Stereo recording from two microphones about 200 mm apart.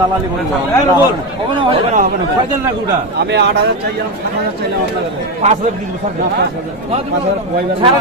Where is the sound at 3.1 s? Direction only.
55° right (ahead or behind).